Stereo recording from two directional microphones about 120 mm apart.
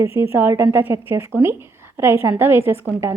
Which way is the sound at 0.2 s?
20° right (ahead or behind).